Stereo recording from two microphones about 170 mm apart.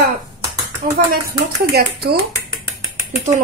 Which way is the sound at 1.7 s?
65° right (ahead or behind).